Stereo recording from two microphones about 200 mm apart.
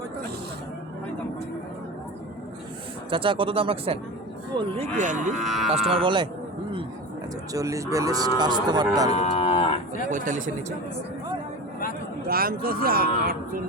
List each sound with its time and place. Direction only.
3.1 s speech: 25° right (ahead or behind)
5.5 s speech: centre (ahead or behind)
5.9 s speech: 25° right (ahead or behind)
7.5 s cattle: 15° right (ahead or behind)
8.7 s speech: 20° right (ahead or behind)
9.1 s moo: 30° left (ahead or behind)
10.1 s speech: 40° right (ahead or behind)
12.3 s speech: 45° right (ahead or behind)